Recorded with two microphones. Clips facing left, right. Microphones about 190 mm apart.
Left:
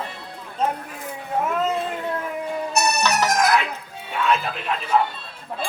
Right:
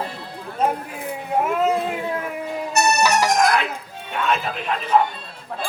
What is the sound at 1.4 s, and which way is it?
Speech, 10° right (ahead or behind).